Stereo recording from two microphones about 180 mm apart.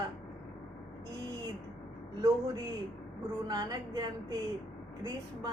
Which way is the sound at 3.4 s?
20° right (ahead or behind).